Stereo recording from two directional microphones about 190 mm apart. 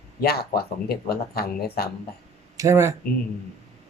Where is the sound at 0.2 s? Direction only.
55° left (ahead or behind).